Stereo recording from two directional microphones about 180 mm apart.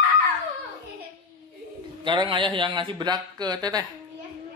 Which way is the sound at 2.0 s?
25° right (ahead or behind).